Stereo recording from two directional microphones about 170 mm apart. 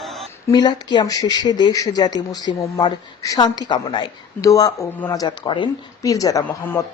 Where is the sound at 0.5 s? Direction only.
25° left (ahead or behind).